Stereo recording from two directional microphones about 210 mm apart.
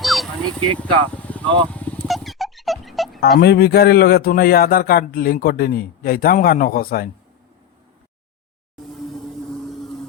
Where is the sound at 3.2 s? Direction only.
50° left (ahead or behind).